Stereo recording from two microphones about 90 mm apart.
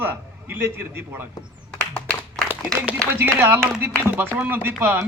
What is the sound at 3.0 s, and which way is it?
A man's voice, 30° right (ahead or behind).